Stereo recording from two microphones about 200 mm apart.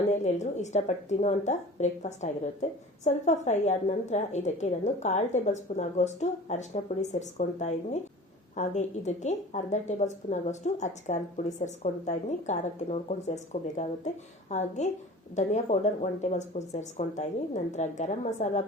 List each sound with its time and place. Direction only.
0.1 s a woman's voice: 35° left (ahead or behind)